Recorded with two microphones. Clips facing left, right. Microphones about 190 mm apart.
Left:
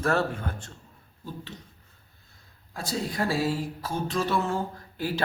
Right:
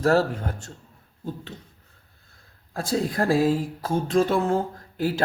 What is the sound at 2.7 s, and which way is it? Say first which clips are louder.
Speech: right 6 dB; 50° right (ahead or behind).